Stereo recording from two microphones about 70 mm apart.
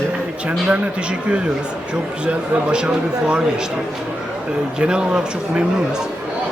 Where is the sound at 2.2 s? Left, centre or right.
Centre.